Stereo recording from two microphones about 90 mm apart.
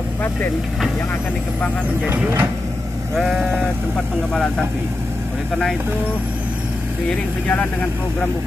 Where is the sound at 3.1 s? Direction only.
Centre (ahead or behind).